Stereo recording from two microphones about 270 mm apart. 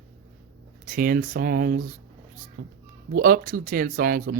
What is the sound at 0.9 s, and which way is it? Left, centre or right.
Speech, right.